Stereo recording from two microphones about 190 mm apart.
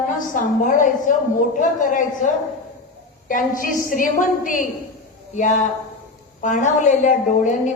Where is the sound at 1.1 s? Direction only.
45° left (ahead or behind).